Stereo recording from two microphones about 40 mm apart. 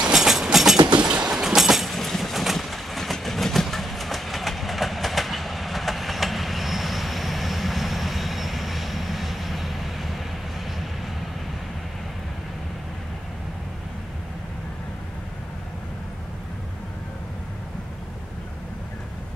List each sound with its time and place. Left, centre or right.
0.0 s train: centre
1.0 s train: centre
1.9 s train: centre